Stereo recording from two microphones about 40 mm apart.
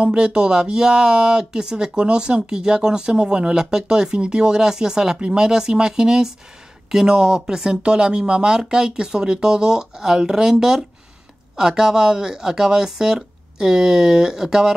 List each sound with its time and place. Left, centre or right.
0.0 s speech: right